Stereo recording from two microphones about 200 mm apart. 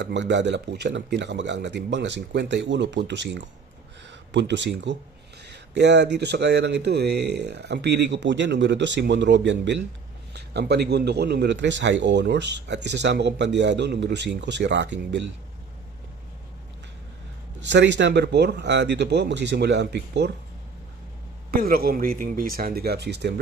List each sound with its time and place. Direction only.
0.0 s a man's voice: 60° right (ahead or behind)
17.6 s a man's voice: 60° right (ahead or behind)
21.5 s a man's voice: 50° right (ahead or behind)